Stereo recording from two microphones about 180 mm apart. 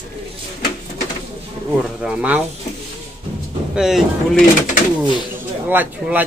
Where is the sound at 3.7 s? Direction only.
Centre (ahead or behind).